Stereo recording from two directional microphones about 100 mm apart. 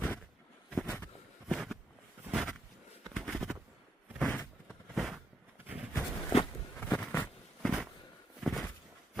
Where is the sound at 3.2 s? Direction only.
Centre (ahead or behind).